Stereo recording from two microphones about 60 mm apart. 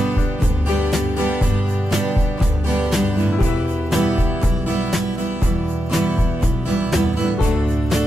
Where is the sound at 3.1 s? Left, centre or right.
Centre.